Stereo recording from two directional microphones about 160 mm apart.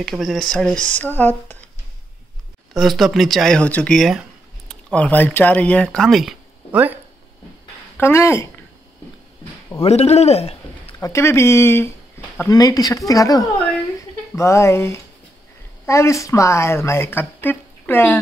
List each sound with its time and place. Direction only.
0.0 s speech: centre (ahead or behind)
2.7 s speech: centre (ahead or behind)
8.0 s speech: 15° left (ahead or behind)
9.8 s a man's voice: 40° left (ahead or behind)
11.0 s speech: 20° left (ahead or behind)